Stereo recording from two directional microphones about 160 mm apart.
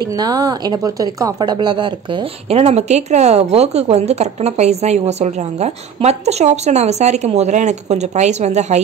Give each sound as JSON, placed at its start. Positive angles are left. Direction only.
{"t": 0.0, "sound": "speech", "side_deg": -25}